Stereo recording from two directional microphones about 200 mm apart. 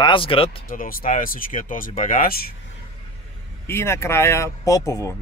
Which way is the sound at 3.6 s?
15° left (ahead or behind).